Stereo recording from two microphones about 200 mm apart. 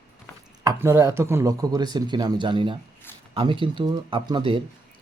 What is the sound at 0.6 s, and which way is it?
Speech, 15° right (ahead or behind).